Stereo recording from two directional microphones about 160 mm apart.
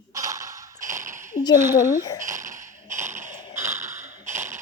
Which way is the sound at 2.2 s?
20° right (ahead or behind).